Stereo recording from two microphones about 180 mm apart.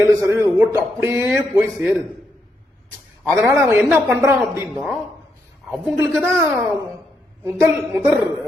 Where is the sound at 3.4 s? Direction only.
15° right (ahead or behind).